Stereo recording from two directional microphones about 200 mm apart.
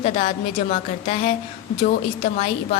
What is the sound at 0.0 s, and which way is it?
A woman's voice, 30° left (ahead or behind).